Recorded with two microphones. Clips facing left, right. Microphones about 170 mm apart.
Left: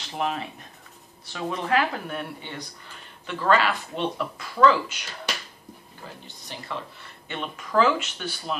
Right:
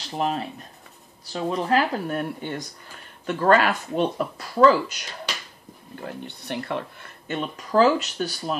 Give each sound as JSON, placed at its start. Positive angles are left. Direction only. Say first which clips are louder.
{"t": 0.2, "sound": "speech", "louder": "right 2 dB", "side_deg": -35}
{"t": 6.0, "sound": "speech", "louder": "right 9 dB", "side_deg": -60}
{"t": 7.2, "sound": "speech", "louder": "right 5 dB", "side_deg": -40}